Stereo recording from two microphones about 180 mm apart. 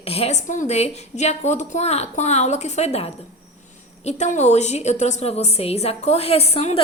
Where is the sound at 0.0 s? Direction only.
35° left (ahead or behind).